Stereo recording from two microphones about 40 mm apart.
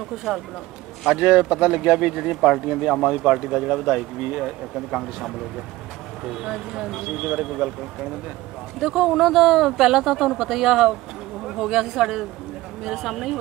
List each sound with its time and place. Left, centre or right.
1.1 s speech: centre
8.7 s speech: centre